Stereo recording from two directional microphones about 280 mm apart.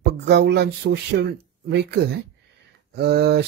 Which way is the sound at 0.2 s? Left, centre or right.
Right.